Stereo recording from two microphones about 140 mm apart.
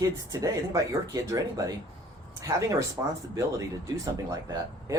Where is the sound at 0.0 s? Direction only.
25° right (ahead or behind).